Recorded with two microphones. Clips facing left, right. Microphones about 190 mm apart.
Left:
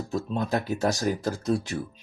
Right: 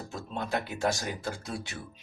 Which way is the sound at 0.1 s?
40° left (ahead or behind).